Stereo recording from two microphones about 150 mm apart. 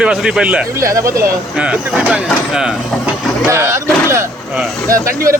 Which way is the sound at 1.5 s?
5° right (ahead or behind).